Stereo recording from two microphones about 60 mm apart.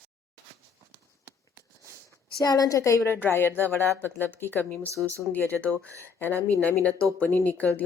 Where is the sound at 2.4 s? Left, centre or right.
Left.